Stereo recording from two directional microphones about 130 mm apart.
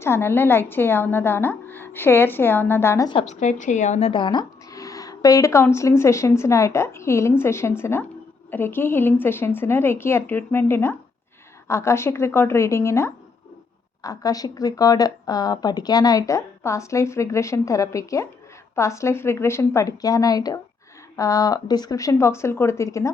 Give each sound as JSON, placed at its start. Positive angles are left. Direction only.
{"t": 0.0, "sound": "a woman's voice", "side_deg": 20}
{"t": 3.2, "sound": "a woman's voice", "side_deg": 70}
{"t": 4.1, "sound": "a woman's voice", "side_deg": 35}